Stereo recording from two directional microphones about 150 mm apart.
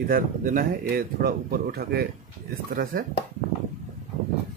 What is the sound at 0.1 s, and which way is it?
Speech, 65° right (ahead or behind).